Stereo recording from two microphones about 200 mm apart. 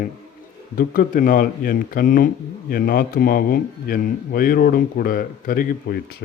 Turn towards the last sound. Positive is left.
turn(degrees=50)  # may be behind; listen again after turning